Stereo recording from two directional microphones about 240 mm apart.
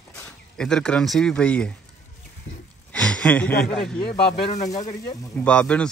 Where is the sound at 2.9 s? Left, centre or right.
Centre.